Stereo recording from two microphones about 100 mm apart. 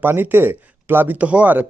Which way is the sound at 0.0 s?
20° right (ahead or behind).